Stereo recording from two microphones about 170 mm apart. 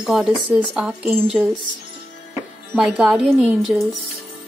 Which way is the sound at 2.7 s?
Centre (ahead or behind).